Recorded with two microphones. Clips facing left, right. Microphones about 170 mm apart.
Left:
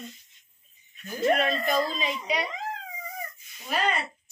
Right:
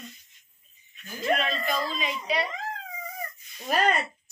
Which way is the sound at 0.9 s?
40° left (ahead or behind).